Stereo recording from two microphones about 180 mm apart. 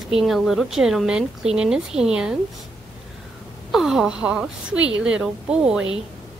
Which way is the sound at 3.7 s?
Centre (ahead or behind).